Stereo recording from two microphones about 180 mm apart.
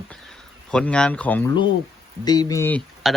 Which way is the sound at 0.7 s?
5° left (ahead or behind).